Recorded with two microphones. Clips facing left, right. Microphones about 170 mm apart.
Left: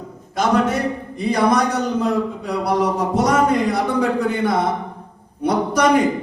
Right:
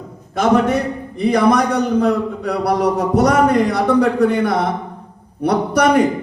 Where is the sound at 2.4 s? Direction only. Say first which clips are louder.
Right 3 dB; 65° right (ahead or behind).